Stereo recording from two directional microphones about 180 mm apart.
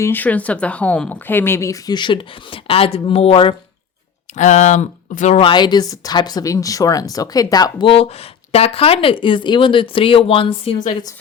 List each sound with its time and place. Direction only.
0.0 s a woman's voice: 10° left (ahead or behind); by 5.4 s 45° left (ahead or behind)
5.4 s speech: 25° left (ahead or behind)